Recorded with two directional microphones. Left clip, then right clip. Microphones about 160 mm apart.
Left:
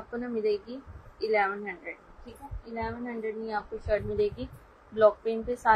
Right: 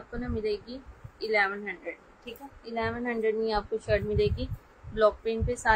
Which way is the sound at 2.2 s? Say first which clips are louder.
Right 3 dB; 20° right (ahead or behind).